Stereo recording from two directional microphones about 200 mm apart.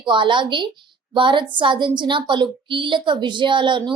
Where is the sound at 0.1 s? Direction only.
25° right (ahead or behind).